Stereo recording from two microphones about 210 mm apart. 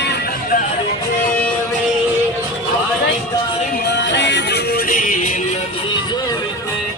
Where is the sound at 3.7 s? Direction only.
55° left (ahead or behind); by 5.4 s 35° left (ahead or behind).